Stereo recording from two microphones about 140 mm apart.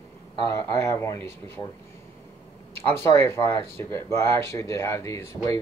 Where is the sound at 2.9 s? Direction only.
20° left (ahead or behind).